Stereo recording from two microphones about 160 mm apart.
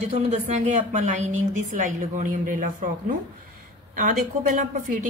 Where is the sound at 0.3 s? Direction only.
45° right (ahead or behind).